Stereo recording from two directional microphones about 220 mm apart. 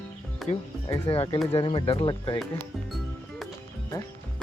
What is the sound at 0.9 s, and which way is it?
Speech, 20° left (ahead or behind).